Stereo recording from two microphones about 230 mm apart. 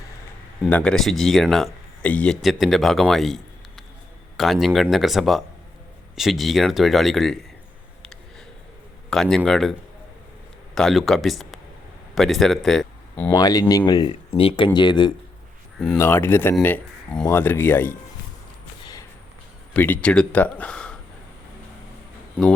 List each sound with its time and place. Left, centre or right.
0.6 s speech: centre
9.0 s speech: centre
10.8 s speech: centre
13.3 s speech: centre
15.8 s speech: centre
18.8 s a sound: centre
19.7 s speech: centre